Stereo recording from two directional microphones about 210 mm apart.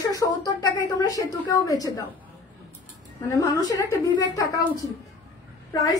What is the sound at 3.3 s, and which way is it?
A woman's voice, 15° left (ahead or behind).